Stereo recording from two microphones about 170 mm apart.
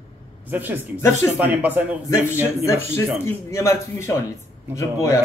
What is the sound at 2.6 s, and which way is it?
A man's voice, 15° left (ahead or behind).